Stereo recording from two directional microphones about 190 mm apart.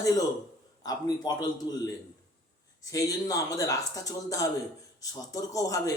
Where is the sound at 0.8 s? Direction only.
20° left (ahead or behind).